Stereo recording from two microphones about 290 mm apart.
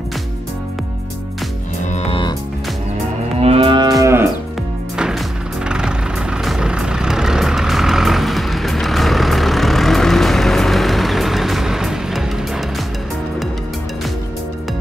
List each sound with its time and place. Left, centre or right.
1.9 s music: centre
3.3 s livestock: centre
4.0 s moo: centre
5.7 s vehicle: centre